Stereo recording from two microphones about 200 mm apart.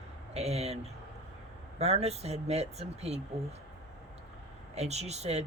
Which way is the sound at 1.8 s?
30° right (ahead or behind).